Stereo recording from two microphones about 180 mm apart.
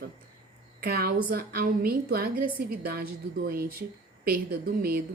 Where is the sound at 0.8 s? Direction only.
55° right (ahead or behind).